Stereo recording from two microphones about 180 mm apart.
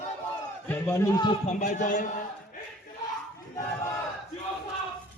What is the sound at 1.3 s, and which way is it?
Speech, 40° left (ahead or behind).